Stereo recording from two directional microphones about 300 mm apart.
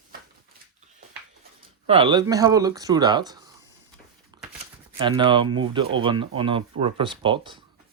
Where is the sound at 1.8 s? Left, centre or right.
Centre.